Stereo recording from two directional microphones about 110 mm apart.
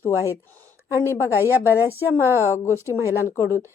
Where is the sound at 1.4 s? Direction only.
20° right (ahead or behind).